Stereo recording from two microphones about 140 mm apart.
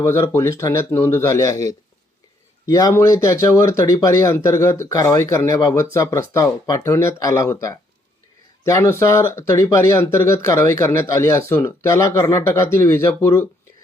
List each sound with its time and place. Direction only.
0.0 s speech: 20° left (ahead or behind)